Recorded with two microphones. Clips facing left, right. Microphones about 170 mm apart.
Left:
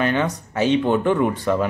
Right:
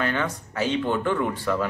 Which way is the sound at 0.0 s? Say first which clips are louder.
Left 5 dB; 20° left (ahead or behind).